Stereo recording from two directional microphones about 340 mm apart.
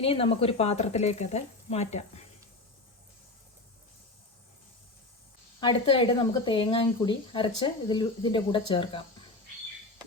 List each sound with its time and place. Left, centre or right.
0.0 s speech: centre
5.5 s speech: centre